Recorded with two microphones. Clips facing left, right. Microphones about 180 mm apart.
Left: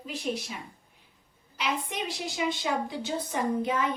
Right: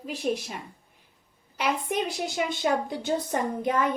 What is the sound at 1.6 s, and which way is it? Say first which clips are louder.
A woman's voice: right 5 dB; 55° right (ahead or behind).